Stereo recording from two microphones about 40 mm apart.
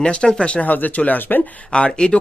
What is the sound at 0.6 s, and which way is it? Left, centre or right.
Speech, left.